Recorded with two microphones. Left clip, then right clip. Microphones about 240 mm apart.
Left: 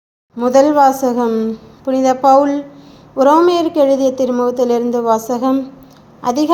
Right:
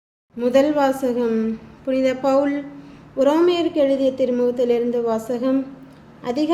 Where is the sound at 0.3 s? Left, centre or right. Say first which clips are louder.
Left 7 dB; left.